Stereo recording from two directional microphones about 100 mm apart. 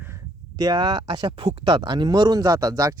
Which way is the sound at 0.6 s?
40° right (ahead or behind).